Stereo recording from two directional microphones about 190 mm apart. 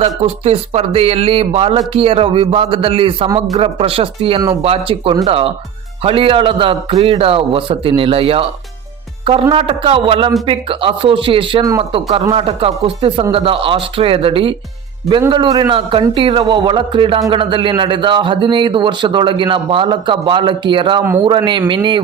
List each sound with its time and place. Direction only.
0.0 s a man's voice: 30° right (ahead or behind)